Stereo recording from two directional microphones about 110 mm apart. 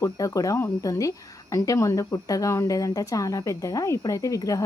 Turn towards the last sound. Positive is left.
turn(degrees=30)  # may be behind; listen again after turning